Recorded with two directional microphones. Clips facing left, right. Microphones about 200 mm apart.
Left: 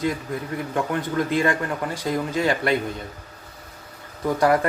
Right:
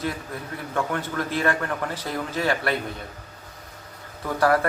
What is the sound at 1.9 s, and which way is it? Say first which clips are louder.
Speech: left 4 dB; 15° left (ahead or behind).